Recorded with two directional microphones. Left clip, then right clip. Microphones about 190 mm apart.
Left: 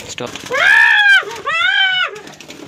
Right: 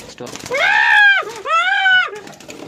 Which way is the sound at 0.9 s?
55° right (ahead or behind).